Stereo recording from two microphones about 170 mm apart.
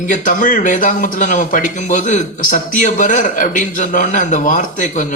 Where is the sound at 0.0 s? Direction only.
50° left (ahead or behind).